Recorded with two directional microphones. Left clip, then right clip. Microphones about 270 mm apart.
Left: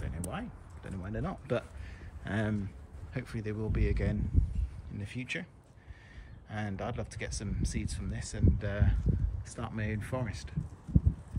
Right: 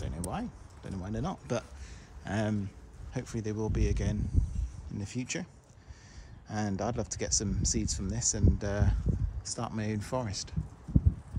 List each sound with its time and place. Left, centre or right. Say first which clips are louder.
0.0 s speech: right 3 dB; centre
4.9 s speech: right 1 dB; centre